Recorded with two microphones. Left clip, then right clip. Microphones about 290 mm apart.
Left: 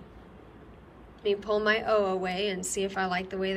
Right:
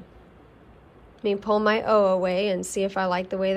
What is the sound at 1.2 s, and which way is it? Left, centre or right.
A woman's voice, centre.